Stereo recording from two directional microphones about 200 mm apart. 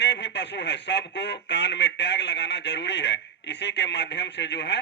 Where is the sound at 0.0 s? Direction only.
60° left (ahead or behind).